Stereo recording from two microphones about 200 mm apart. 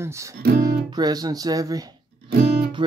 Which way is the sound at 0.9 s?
20° right (ahead or behind).